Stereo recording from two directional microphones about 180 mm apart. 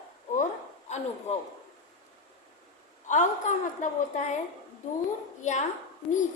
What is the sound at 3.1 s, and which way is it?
A woman's voice, 45° left (ahead or behind).